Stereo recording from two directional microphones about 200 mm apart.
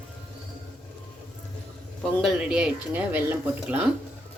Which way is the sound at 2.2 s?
5° right (ahead or behind).